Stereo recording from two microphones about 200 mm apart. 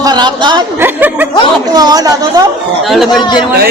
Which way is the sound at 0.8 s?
10° right (ahead or behind).